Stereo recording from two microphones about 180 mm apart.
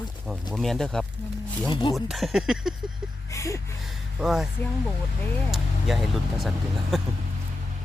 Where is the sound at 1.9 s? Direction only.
Centre (ahead or behind).